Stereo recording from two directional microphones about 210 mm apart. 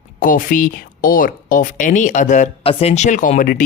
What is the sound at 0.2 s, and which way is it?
Speech, 40° left (ahead or behind).